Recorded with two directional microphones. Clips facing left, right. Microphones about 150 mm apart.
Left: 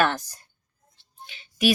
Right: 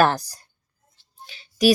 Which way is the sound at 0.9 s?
40° right (ahead or behind).